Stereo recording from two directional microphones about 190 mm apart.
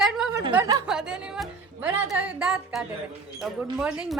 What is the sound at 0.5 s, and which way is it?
Speech, 20° right (ahead or behind).